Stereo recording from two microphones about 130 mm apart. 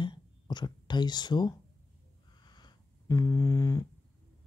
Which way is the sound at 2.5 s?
30° left (ahead or behind).